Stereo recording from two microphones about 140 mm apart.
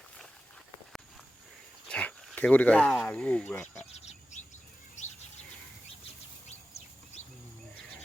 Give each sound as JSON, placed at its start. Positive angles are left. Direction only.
{"t": 1.9, "sound": "a sound", "side_deg": 10}
{"t": 3.1, "sound": "speech", "side_deg": 10}
{"t": 3.9, "sound": "bird", "side_deg": 50}